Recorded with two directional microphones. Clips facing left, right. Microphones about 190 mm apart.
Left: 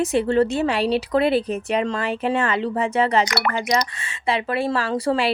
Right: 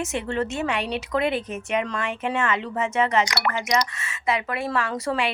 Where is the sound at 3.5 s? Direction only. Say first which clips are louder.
Left 2 dB; 35° left (ahead or behind).